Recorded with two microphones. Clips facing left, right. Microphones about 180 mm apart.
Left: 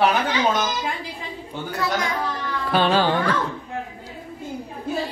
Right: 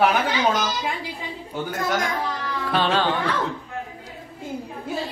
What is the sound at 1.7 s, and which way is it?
Speech, 45° right (ahead or behind).